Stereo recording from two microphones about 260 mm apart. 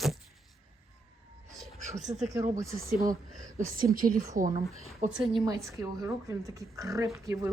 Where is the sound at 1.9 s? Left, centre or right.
Right.